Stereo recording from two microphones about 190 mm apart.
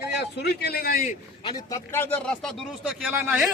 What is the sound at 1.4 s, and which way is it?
A man's voice, 20° left (ahead or behind).